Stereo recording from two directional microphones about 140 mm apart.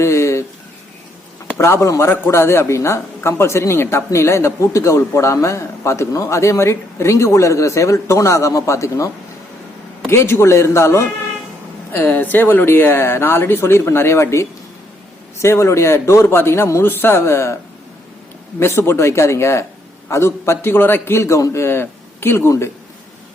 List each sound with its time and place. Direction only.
0.0 s a sound: 20° left (ahead or behind)
1.5 s speech: 20° left (ahead or behind)
10.1 s speech: 20° left (ahead or behind)
18.6 s speech: 15° left (ahead or behind)